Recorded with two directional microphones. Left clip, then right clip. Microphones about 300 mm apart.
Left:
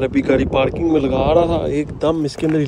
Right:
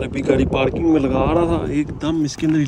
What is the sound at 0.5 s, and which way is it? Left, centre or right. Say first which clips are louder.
Speech: left 2 dB; centre.